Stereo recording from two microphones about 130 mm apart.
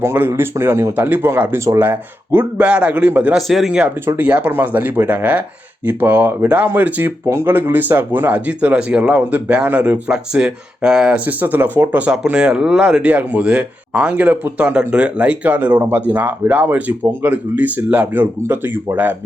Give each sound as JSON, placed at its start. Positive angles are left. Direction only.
{"t": 0.0, "sound": "speech", "side_deg": -15}
{"t": 3.3, "sound": "speech", "side_deg": 0}